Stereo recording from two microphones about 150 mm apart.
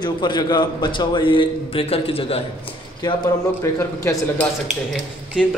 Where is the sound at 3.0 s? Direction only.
25° left (ahead or behind).